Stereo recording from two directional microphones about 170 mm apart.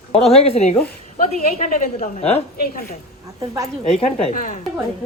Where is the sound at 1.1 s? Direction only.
50° left (ahead or behind).